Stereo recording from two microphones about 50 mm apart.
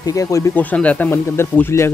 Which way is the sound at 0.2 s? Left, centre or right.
Left.